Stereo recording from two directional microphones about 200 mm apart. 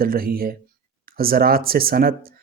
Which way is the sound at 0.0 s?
50° right (ahead or behind).